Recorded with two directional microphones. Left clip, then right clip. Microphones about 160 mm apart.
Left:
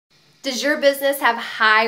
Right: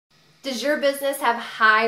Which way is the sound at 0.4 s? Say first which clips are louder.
Left 3 dB; 10° left (ahead or behind).